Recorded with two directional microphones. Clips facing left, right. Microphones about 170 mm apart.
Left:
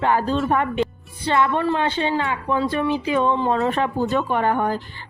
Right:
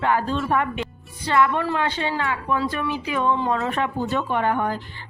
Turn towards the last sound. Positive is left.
turn(degrees=40)  # may be behind; listen again after turning